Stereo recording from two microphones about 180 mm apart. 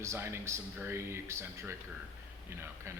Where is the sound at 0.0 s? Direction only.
15° right (ahead or behind).